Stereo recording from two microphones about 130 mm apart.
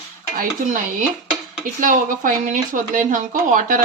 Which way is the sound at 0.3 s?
90° right.